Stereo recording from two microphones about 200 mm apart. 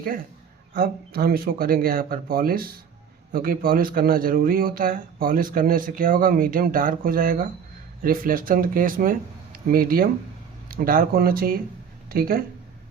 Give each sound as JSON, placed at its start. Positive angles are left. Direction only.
{"t": 0.7, "sound": "speech", "side_deg": -45}